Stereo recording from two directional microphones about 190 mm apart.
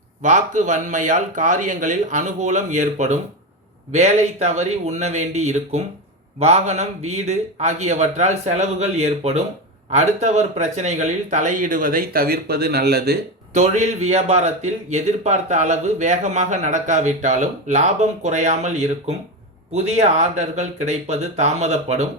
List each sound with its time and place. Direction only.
0.2 s a man's voice: 40° right (ahead or behind); by 13.1 s 55° right (ahead or behind)
13.5 s a man's voice: 35° right (ahead or behind)